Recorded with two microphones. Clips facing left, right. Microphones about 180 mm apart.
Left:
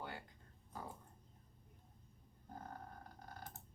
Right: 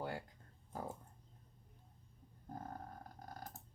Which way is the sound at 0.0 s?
40° right (ahead or behind).